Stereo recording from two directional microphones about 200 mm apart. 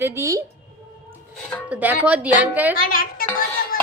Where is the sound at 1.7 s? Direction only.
5° right (ahead or behind).